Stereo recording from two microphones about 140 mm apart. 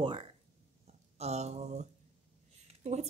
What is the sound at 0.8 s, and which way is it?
Speech, 50° right (ahead or behind).